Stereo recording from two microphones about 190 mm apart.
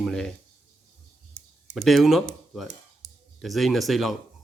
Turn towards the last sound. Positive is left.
turn(degrees=0)  # may be behind; listen again after turning